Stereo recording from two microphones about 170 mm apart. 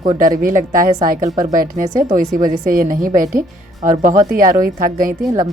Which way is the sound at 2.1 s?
50° right (ahead or behind).